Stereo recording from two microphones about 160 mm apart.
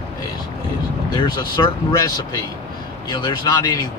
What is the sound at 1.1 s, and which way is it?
Speech, 25° left (ahead or behind).